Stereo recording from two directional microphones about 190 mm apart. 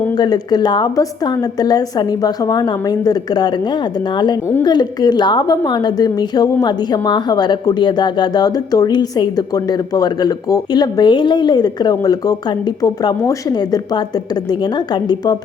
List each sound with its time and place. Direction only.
0.2 s a woman's voice: 20° left (ahead or behind)
4.6 s a woman's voice: 20° left (ahead or behind)